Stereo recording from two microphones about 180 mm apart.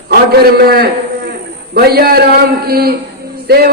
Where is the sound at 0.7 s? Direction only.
60° right (ahead or behind).